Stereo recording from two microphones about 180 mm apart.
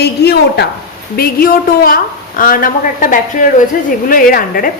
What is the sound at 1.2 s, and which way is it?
A woman's voice, 55° left (ahead or behind).